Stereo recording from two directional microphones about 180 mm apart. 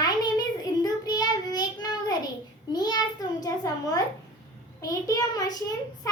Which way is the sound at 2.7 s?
20° left (ahead or behind).